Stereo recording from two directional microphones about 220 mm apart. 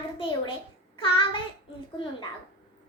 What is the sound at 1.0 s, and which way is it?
Speech, 25° left (ahead or behind).